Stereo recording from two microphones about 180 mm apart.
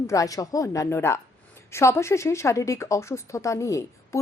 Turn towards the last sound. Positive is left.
turn(degrees=15)  # may be behind; listen again after turning